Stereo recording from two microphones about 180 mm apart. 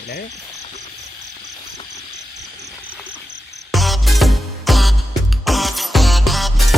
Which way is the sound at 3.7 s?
Centre (ahead or behind).